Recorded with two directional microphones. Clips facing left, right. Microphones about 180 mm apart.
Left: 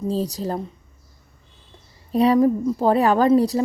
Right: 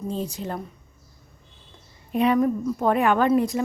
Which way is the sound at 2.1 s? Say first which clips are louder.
Left 4 dB; 35° left (ahead or behind).